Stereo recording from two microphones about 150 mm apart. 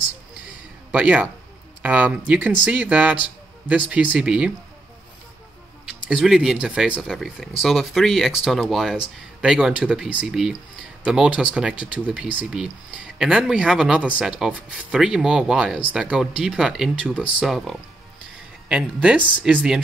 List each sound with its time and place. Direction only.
0.9 s speech: 10° right (ahead or behind)
6.0 s speech: 5° right (ahead or behind)